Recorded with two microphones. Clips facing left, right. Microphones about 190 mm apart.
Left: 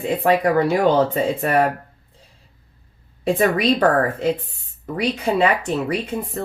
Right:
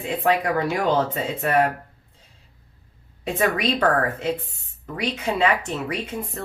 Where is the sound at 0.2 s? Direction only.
35° left (ahead or behind).